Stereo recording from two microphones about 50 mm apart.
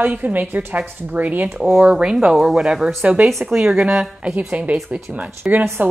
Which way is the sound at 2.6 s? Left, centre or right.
Centre.